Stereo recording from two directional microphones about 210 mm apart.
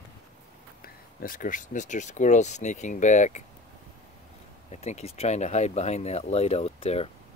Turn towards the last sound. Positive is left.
turn(degrees=30)  # may be behind; listen again after turning